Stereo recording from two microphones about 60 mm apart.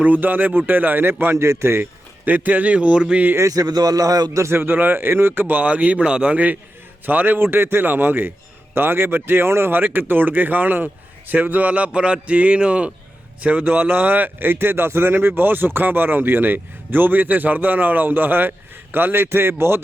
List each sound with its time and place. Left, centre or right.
0.0 s a man's voice: right
1.4 s a man's voice: right
2.2 s speech: right
3.5 s a man's voice: right
4.4 s a man's voice: right